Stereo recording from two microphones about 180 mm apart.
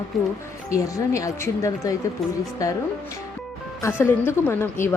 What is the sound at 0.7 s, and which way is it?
Speech, 20° left (ahead or behind).